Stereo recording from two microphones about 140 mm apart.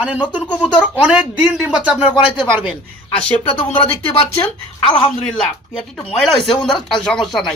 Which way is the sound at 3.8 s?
40° left (ahead or behind).